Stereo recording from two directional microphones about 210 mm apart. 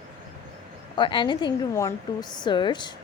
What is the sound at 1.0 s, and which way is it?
A woman's voice, 20° left (ahead or behind).